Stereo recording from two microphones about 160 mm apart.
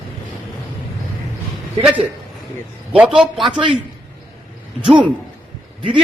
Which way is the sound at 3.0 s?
5° right (ahead or behind).